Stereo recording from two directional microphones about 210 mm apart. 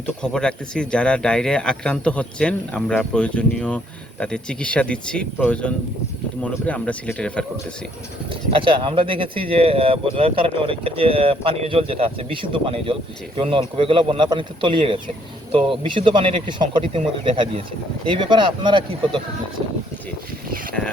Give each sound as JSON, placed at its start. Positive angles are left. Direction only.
{"t": 0.0, "sound": "speech", "side_deg": 5}
{"t": 8.3, "sound": "speech", "side_deg": -25}